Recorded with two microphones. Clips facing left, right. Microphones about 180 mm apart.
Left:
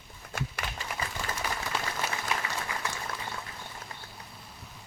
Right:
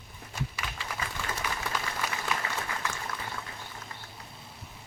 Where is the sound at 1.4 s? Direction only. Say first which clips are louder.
Left 1 dB; 40° left (ahead or behind).